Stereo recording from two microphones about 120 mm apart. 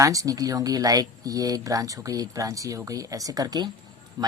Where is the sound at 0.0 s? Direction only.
30° right (ahead or behind).